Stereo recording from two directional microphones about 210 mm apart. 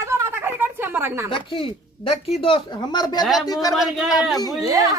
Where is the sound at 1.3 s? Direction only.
25° left (ahead or behind).